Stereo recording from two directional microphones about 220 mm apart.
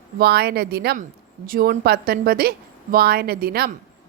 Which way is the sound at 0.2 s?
45° right (ahead or behind).